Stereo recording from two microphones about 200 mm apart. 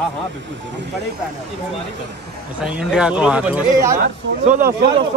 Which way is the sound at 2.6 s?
5° right (ahead or behind).